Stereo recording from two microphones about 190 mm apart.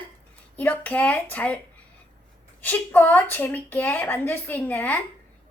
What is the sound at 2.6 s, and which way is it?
A woman's voice, 10° left (ahead or behind).